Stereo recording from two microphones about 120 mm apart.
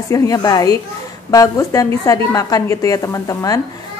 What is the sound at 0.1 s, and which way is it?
A woman's voice, 30° left (ahead or behind).